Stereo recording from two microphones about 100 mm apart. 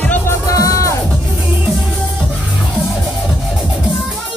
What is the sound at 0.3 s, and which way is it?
Music, 35° left (ahead or behind).